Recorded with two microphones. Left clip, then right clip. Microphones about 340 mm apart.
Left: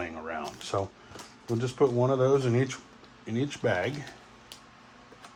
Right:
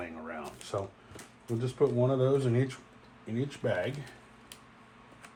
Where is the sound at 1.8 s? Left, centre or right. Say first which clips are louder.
Left 3 dB; left.